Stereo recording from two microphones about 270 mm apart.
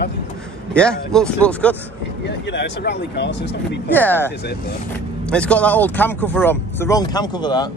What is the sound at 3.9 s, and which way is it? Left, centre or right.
Speech, centre.